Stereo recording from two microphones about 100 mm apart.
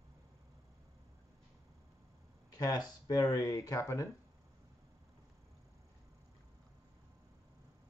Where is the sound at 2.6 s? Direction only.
40° left (ahead or behind).